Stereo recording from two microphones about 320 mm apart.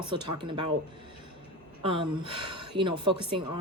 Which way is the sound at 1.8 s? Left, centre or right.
Centre.